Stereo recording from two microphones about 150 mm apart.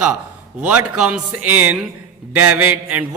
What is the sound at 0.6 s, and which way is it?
A man's voice, 10° right (ahead or behind).